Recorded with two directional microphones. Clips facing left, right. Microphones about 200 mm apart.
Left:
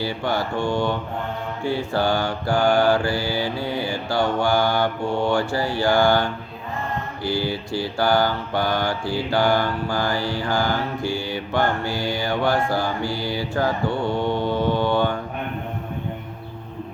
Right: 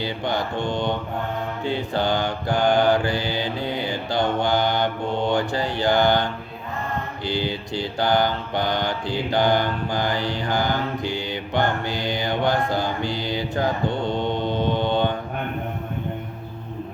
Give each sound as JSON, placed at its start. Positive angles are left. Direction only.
{"t": 0.0, "sound": "mantra", "side_deg": -20}